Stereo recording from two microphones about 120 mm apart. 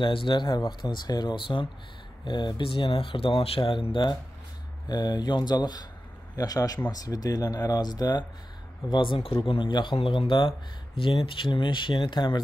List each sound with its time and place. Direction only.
0.0 s speech: 45° left (ahead or behind)